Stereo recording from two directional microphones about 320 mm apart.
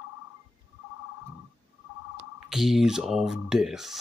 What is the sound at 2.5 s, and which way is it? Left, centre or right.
Speech, centre.